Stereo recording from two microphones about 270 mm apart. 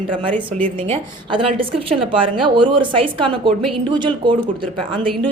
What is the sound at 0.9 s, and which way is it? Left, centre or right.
A woman's voice, centre.